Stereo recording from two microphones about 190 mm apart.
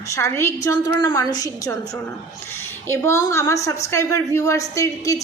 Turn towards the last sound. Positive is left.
turn(degrees=15)  # may be behind; listen again after turning